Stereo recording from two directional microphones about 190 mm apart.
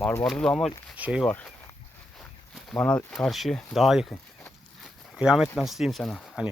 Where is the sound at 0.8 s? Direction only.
5° right (ahead or behind).